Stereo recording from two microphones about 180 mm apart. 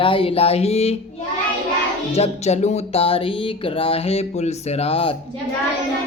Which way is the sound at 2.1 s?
35° left (ahead or behind).